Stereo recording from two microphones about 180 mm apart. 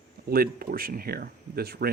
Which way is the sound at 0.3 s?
55° right (ahead or behind).